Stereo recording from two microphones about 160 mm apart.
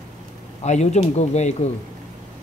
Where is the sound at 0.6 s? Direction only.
45° left (ahead or behind).